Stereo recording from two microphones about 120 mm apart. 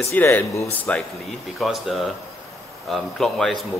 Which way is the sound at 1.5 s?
Centre (ahead or behind).